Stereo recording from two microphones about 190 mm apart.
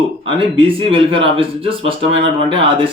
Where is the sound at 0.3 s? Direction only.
25° right (ahead or behind).